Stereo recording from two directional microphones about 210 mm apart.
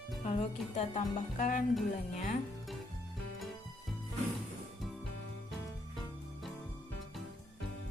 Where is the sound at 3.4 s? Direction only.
Centre (ahead or behind).